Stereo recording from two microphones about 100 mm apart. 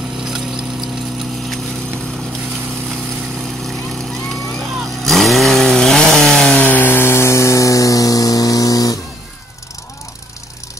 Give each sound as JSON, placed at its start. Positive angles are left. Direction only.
{"t": 0.2, "sound": "vehicle", "side_deg": -5}
{"t": 3.4, "sound": "vehicle", "side_deg": 5}
{"t": 6.6, "sound": "a sound", "side_deg": 20}